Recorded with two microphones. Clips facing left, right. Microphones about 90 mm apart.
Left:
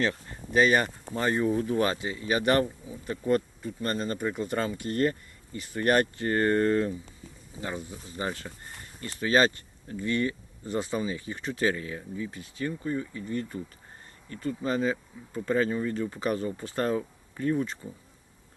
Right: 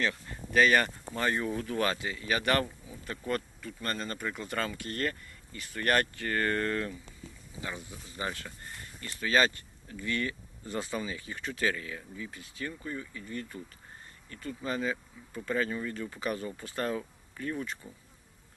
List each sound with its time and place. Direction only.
0.0 s speech: 30° left (ahead or behind)